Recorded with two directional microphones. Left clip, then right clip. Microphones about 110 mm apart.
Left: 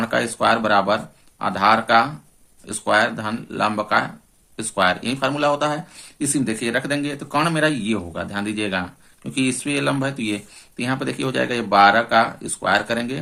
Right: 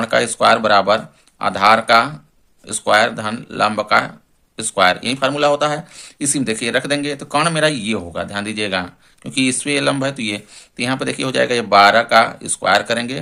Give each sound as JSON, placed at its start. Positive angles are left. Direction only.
{"t": 0.0, "sound": "speech", "side_deg": -35}